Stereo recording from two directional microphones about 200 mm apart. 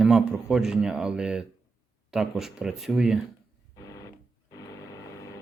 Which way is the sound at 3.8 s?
15° left (ahead or behind).